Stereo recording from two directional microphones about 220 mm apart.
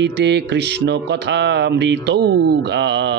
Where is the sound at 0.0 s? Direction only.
50° right (ahead or behind).